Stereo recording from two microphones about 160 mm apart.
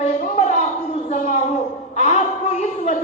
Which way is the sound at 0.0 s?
50° left (ahead or behind).